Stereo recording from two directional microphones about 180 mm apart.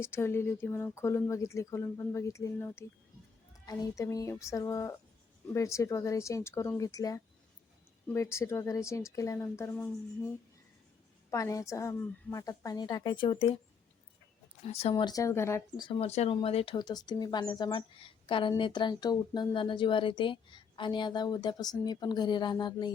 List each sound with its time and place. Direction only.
0.0 s speech: 15° left (ahead or behind)
11.3 s speech: 15° left (ahead or behind)
14.7 s speech: 35° left (ahead or behind); by 15.9 s 15° left (ahead or behind)
15.9 s speech: 35° left (ahead or behind)